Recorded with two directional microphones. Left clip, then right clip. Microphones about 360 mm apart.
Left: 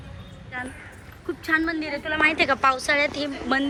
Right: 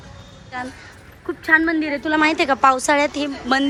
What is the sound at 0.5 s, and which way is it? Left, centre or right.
A woman's voice, centre.